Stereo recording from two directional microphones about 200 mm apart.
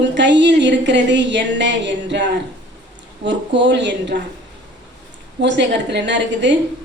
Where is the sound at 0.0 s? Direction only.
60° right (ahead or behind).